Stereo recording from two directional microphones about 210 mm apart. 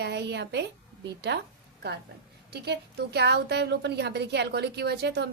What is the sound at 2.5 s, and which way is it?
A woman's voice, 50° right (ahead or behind).